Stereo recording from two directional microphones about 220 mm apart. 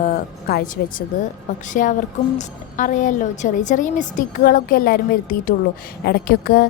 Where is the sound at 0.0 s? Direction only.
40° left (ahead or behind).